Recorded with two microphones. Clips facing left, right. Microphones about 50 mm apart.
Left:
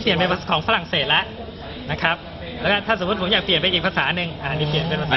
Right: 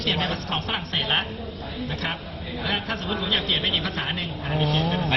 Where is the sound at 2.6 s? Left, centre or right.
Left.